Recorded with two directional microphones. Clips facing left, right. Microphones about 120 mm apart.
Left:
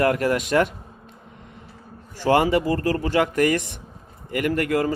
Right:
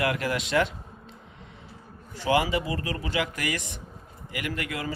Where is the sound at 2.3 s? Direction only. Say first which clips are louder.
Left 6 dB; 50° left (ahead or behind).